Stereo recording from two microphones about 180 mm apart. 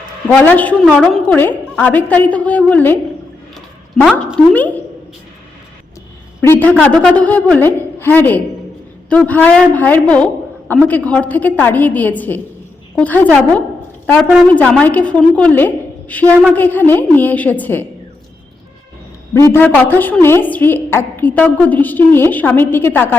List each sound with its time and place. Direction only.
0.3 s a woman's voice: 10° left (ahead or behind)
4.4 s a woman's voice: 10° left (ahead or behind)
6.4 s a woman's voice: 10° left (ahead or behind)
14.4 s a woman's voice: 5° left (ahead or behind)
19.3 s a woman's voice: 15° left (ahead or behind)